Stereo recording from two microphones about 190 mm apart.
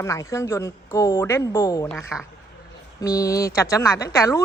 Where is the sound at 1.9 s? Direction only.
Centre (ahead or behind).